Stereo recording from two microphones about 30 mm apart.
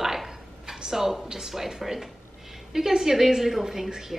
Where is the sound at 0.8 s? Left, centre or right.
Centre.